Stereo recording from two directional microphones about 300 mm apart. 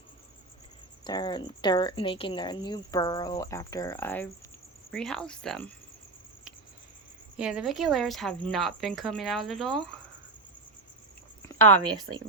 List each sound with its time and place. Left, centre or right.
1.0 s speech: centre
7.3 s speech: centre
12.1 s speech: right